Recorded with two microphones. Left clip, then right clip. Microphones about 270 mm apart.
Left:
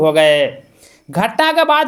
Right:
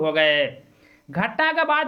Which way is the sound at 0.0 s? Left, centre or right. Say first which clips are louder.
Left 8 dB; right.